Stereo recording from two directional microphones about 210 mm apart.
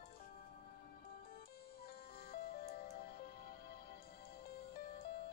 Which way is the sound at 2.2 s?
45° left (ahead or behind).